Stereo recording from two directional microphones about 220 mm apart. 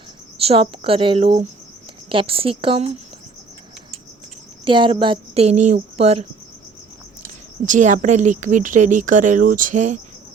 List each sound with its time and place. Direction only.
0.3 s speech: 25° right (ahead or behind)
4.6 s speech: 20° right (ahead or behind)
7.6 s a woman's voice: 35° right (ahead or behind)